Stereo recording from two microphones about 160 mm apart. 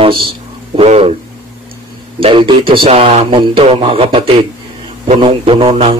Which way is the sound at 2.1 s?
30° right (ahead or behind).